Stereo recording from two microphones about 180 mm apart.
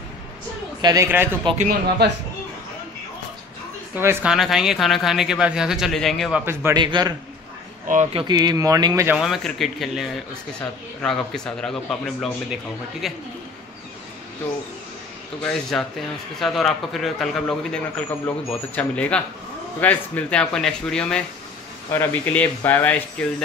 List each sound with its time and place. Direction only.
0.7 s a woman's voice: 20° right (ahead or behind)
1.6 s speech: 60° right (ahead or behind)
3.9 s speech: 10° right (ahead or behind)
6.4 s a woman's voice: 15° right (ahead or behind)
6.8 s speech: 25° right (ahead or behind)
7.9 s speech: 40° right (ahead or behind)
8.2 s speech: 25° right (ahead or behind)
9.1 s speech: centre (ahead or behind)
15.8 s speech: 5° left (ahead or behind)